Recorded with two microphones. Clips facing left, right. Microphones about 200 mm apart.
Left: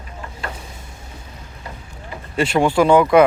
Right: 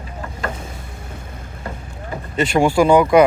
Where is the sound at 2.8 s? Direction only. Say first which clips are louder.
Even; 5° right (ahead or behind).